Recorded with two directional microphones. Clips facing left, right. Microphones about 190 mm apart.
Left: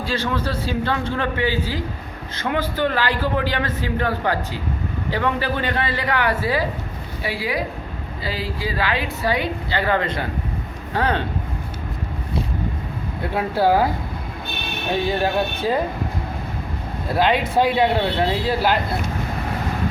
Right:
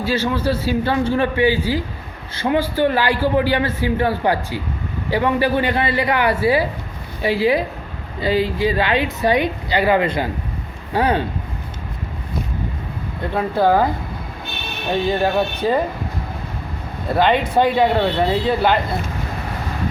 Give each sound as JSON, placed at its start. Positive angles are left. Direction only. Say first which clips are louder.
{"t": 0.0, "sound": "a man's voice", "louder": "right 4 dB", "side_deg": -5}
{"t": 7.2, "sound": "a man's voice", "louder": "right 8 dB", "side_deg": -25}
{"t": 13.3, "sound": "speech", "louder": "right 2 dB", "side_deg": 10}
{"t": 17.1, "sound": "speech", "louder": "right 3 dB", "side_deg": 0}